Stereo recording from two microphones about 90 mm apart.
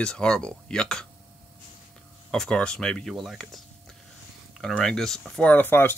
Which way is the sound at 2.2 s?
5° left (ahead or behind).